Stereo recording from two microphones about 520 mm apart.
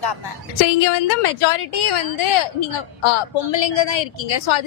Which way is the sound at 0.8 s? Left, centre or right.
Left.